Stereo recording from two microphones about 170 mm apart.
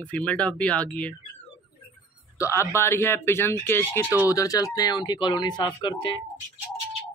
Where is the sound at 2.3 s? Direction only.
15° left (ahead or behind).